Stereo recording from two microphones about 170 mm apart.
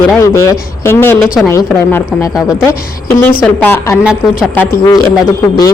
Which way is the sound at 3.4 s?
10° left (ahead or behind).